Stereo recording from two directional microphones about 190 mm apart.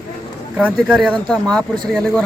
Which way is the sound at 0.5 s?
5° right (ahead or behind).